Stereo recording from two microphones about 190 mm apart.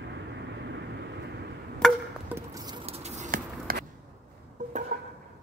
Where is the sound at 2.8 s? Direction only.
35° right (ahead or behind).